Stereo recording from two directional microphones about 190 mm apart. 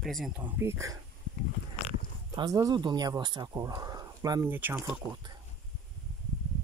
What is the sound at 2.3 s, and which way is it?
Speech, 20° right (ahead or behind).